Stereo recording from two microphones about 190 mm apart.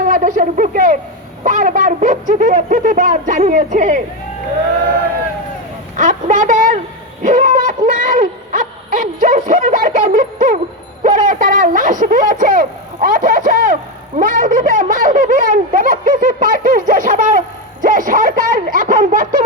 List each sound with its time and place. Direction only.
0.0 s speech: 40° right (ahead or behind)
6.0 s speech: 40° right (ahead or behind)
7.2 s a sound: 40° right (ahead or behind)
14.2 s speech: 45° right (ahead or behind)